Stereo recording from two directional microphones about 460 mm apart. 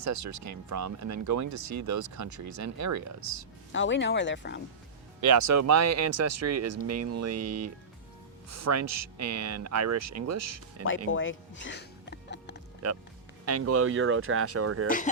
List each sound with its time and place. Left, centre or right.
0.0 s speech: right
3.7 s speech: left
5.2 s speech: right
11.1 s music: left
12.8 s speech: right
14.8 s speech: centre